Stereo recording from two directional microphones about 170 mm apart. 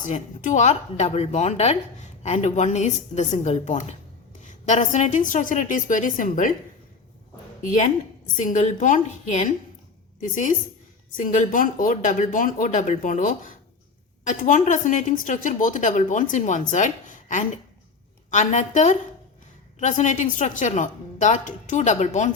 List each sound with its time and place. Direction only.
0.0 s a woman's voice: 45° left (ahead or behind)
8.4 s a woman's voice: 45° left (ahead or behind)
11.2 s a woman's voice: 50° left (ahead or behind)